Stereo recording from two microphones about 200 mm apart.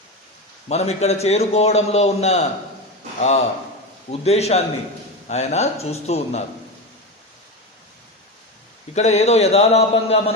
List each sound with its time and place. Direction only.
0.7 s a man's voice: 30° left (ahead or behind)
9.0 s a man's voice: 35° left (ahead or behind)